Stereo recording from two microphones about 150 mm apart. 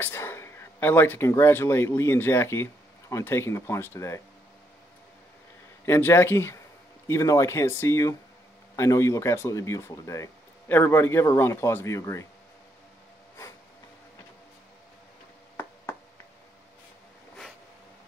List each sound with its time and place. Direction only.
0.0 s speech: 15° left (ahead or behind)
5.9 s speech: 15° left (ahead or behind)
15.5 s tick-tock: 15° left (ahead or behind)